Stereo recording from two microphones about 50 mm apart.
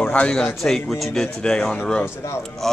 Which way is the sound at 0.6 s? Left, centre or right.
Centre.